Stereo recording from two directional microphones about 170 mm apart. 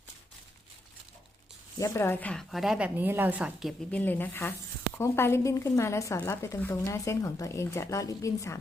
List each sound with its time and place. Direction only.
1.8 s speech: 15° left (ahead or behind); by 3.8 s 5° right (ahead or behind)
3.9 s a woman's voice: 10° left (ahead or behind)